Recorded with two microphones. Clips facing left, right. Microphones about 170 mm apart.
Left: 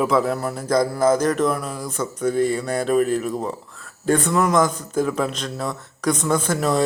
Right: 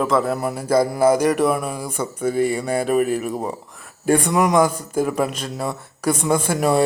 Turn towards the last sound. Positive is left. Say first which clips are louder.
# right 2 dB
turn(degrees=-10)  # may be behind; listen again after turning